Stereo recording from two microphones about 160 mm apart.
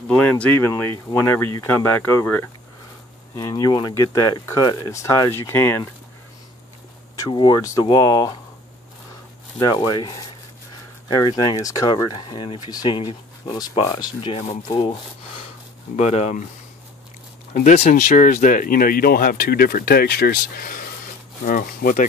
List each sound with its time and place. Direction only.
0.1 s speech: 10° left (ahead or behind)
7.2 s speech: 30° left (ahead or behind)
9.6 s speech: 25° left (ahead or behind)
12.1 s speech: 35° left (ahead or behind)
16.0 s speech: 40° left (ahead or behind)
17.6 s speech: 50° left (ahead or behind)